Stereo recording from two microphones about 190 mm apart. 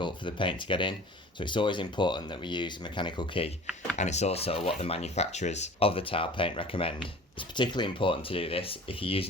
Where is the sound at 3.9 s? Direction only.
35° left (ahead or behind).